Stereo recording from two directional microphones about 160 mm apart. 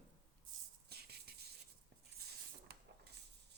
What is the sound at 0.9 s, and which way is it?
Music, 80° right.